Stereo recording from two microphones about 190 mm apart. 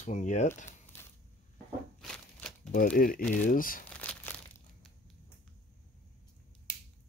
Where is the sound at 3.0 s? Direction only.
50° left (ahead or behind).